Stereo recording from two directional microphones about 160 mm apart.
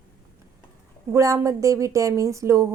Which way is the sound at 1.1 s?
20° right (ahead or behind).